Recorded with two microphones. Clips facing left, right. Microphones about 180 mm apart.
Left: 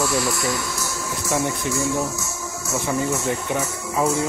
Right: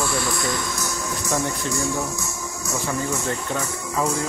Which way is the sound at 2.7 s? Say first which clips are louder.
Left 3 dB; 20° left (ahead or behind).